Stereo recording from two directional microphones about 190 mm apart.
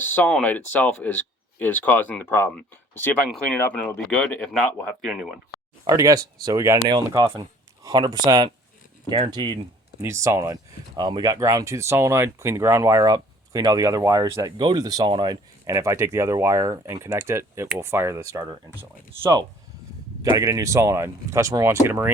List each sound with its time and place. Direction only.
0.0 s speech: 10° left (ahead or behind)
5.8 s speech: 20° right (ahead or behind)